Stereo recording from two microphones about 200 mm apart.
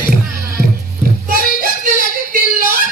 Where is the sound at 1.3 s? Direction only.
45° right (ahead or behind).